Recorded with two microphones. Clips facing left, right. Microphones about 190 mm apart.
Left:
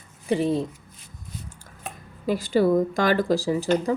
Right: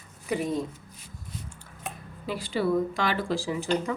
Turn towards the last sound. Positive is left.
turn(degrees=35)  # may be behind; listen again after turning